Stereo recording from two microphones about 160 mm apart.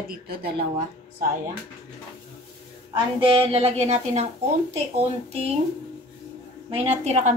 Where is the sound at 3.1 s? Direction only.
35° right (ahead or behind).